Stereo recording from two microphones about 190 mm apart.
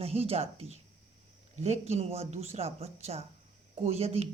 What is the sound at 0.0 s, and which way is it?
Speech, 30° right (ahead or behind).